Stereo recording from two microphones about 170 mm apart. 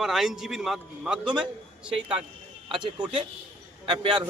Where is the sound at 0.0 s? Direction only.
Centre (ahead or behind).